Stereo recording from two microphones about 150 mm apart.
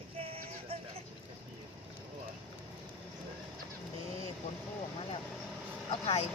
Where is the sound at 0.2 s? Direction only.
40° right (ahead or behind).